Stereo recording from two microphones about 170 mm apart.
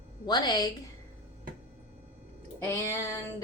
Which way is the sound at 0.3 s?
25° left (ahead or behind).